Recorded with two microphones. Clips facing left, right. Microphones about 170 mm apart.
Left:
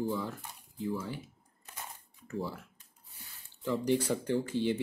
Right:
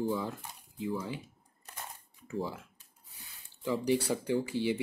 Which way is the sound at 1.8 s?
Centre (ahead or behind).